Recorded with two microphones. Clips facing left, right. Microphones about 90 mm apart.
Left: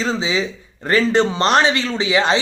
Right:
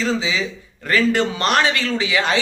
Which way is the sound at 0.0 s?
30° left (ahead or behind).